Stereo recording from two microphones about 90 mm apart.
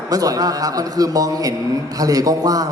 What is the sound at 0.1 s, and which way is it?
A man's voice, 40° right (ahead or behind).